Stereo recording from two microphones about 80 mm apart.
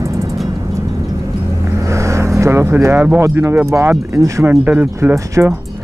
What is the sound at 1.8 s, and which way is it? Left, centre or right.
Vehicle, right.